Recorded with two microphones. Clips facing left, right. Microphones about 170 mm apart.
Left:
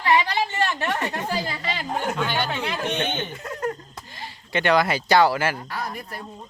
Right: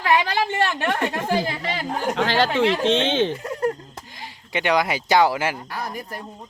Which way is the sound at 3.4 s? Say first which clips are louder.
Right 5 dB; 10° right (ahead or behind).